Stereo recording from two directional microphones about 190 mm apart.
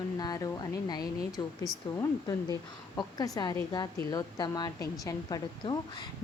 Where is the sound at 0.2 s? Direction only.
20° left (ahead or behind).